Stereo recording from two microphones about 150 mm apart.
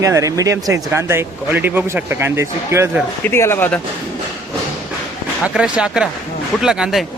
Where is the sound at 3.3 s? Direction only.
15° left (ahead or behind).